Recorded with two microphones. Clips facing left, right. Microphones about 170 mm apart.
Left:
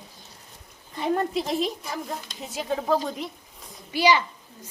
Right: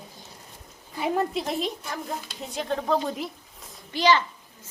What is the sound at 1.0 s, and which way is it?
A woman's voice, centre (ahead or behind).